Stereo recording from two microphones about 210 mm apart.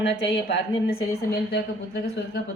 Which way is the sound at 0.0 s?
55° left (ahead or behind).